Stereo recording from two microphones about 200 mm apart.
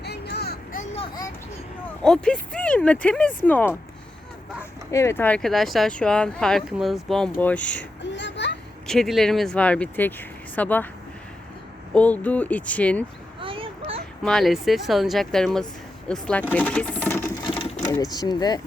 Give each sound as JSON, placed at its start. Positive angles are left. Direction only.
{"t": 0.0, "sound": "a sound", "side_deg": 55}
{"t": 0.9, "sound": "a sound", "side_deg": 25}
{"t": 2.0, "sound": "speech", "side_deg": 5}
{"t": 4.9, "sound": "speech", "side_deg": 15}
{"t": 8.1, "sound": "children playing", "side_deg": 60}
{"t": 8.9, "sound": "speech", "side_deg": 0}
{"t": 11.9, "sound": "speech", "side_deg": 5}
{"t": 13.4, "sound": "a sound", "side_deg": -25}
{"t": 14.3, "sound": "speech", "side_deg": 0}
{"t": 16.5, "sound": "sewing machine", "side_deg": 10}
{"t": 17.9, "sound": "speech", "side_deg": 20}